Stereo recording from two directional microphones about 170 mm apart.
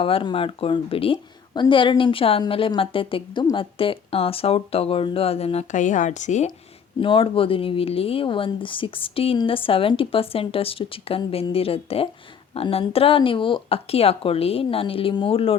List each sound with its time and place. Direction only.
0.0 s a woman's voice: 30° left (ahead or behind)
7.0 s a woman's voice: 30° left (ahead or behind)